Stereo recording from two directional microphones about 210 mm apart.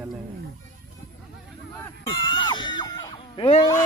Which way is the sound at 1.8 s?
20° left (ahead or behind).